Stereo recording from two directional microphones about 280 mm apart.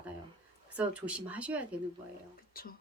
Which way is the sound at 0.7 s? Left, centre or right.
Centre.